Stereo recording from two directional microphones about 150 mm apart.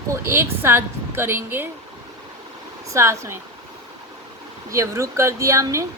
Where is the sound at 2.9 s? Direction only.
20° right (ahead or behind).